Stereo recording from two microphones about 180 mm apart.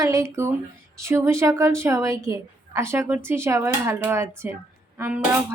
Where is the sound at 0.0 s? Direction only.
15° right (ahead or behind).